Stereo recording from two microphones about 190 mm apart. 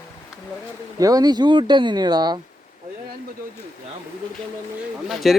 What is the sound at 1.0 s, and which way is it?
Speech, 20° right (ahead or behind).